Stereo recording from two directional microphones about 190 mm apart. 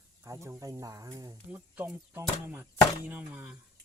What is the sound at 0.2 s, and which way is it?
Speech, 15° right (ahead or behind).